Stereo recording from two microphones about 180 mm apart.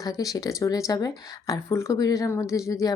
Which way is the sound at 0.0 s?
20° left (ahead or behind).